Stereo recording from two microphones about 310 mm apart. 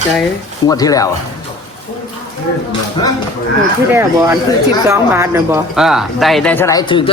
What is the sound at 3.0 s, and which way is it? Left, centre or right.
Speech, centre.